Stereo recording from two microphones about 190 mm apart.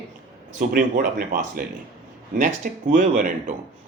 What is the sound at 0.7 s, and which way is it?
Speech, 50° right (ahead or behind).